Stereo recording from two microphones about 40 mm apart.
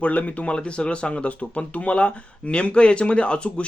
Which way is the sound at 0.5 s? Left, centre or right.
Left.